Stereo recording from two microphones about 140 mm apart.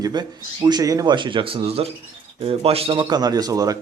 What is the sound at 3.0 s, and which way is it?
Speech, 30° right (ahead or behind).